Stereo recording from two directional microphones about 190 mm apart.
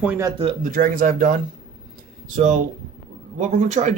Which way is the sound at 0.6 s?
45° right (ahead or behind).